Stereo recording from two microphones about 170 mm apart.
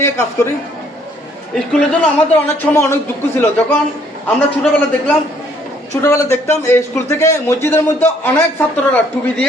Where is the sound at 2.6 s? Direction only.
15° left (ahead or behind).